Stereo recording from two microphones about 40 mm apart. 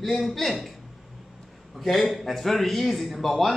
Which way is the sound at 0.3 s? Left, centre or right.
Centre.